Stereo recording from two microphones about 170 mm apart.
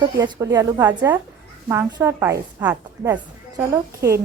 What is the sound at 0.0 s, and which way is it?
A woman's voice, 20° right (ahead or behind).